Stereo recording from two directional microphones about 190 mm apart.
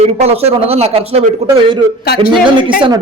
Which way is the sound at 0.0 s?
35° right (ahead or behind).